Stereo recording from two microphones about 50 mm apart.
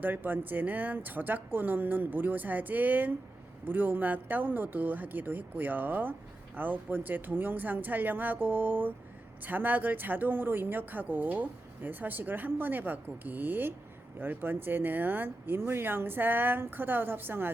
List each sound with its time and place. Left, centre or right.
0.0 s speech: right